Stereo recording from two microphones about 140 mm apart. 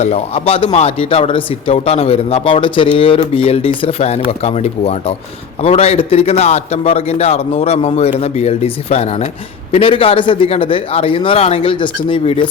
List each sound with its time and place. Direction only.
0.0 s a man's voice: 50° left (ahead or behind)